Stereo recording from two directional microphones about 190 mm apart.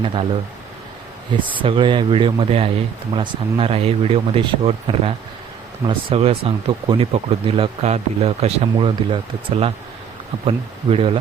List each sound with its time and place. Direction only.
0.0 s speech: 30° right (ahead or behind)
1.3 s speech: 25° right (ahead or behind)
10.9 s speech: 30° right (ahead or behind)